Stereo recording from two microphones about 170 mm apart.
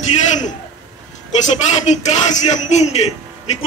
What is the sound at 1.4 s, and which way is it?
A woman's voice, 45° left (ahead or behind).